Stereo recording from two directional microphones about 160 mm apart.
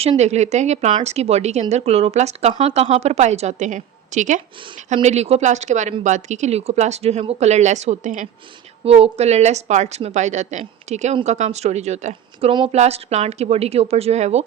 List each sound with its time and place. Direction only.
0.0 s a woman's voice: 45° right (ahead or behind)
8.8 s a woman's voice: 40° right (ahead or behind)